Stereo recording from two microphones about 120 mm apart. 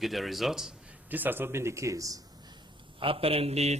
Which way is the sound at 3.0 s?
50° right (ahead or behind).